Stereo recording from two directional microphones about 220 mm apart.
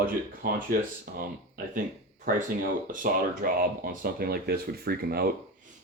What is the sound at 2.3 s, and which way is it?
Speech, 40° right (ahead or behind).